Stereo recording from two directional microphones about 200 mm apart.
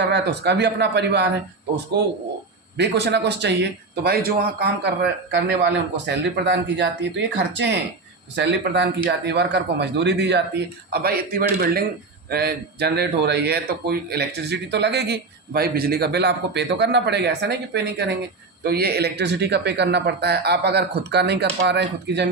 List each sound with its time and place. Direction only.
0.0 s speech: 55° right (ahead or behind)
2.7 s speech: 60° right (ahead or behind)